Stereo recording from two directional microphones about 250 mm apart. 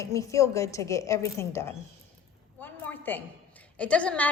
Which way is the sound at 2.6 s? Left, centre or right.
Centre.